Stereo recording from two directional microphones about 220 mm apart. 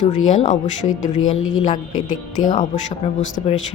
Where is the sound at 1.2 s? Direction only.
60° left (ahead or behind).